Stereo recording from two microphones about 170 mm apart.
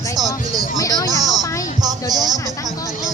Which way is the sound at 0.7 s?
20° left (ahead or behind).